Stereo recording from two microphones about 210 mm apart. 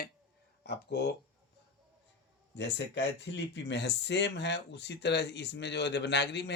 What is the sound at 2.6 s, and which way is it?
Speech, 55° left (ahead or behind).